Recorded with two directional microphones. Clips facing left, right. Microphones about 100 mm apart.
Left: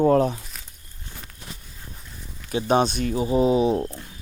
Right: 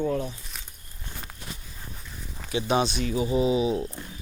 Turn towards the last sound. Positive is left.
turn(degrees=45)  # may be behind; listen again after turning